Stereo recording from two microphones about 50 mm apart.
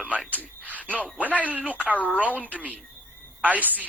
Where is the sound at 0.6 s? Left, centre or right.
Right.